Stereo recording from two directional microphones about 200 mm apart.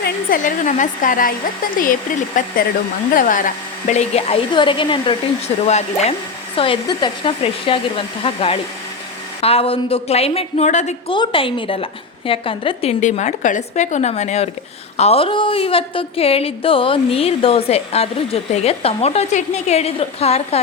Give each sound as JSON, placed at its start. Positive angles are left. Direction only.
{"t": 0.0, "sound": "a woman's voice", "side_deg": 45}
{"t": 11.1, "sound": "a woman's voice", "side_deg": 25}